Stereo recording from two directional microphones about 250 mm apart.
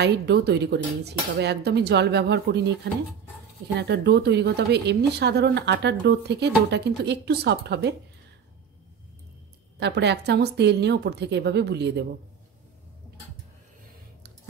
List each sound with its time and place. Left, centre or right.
0.0 s cutlery: right
3.7 s a woman's voice: right
9.8 s a woman's voice: right